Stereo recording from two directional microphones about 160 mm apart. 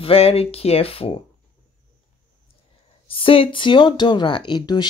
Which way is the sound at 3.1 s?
35° left (ahead or behind).